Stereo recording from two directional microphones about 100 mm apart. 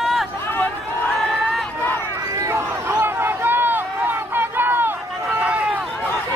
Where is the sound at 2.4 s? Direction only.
25° right (ahead or behind).